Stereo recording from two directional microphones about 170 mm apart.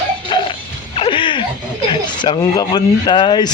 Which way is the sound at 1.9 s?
25° left (ahead or behind).